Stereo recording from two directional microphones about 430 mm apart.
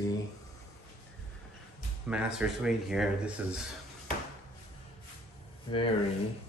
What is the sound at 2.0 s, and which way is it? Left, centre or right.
Speech, centre.